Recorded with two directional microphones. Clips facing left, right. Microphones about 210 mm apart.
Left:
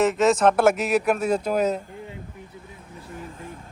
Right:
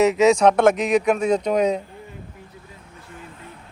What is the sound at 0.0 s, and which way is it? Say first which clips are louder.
Speech: right 3 dB; centre (ahead or behind).